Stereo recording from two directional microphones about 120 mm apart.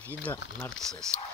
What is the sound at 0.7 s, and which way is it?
Speech, 5° left (ahead or behind).